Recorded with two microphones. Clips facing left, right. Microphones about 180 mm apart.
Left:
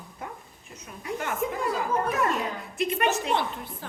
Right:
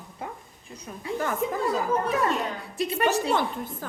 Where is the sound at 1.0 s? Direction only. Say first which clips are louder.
Right 2 dB; 35° right (ahead or behind).